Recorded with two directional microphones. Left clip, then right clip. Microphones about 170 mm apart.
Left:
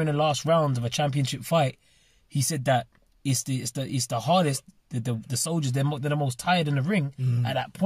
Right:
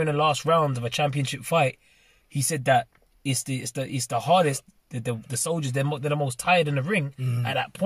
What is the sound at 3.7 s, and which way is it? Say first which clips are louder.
Speech: right 3 dB; 25° left (ahead or behind).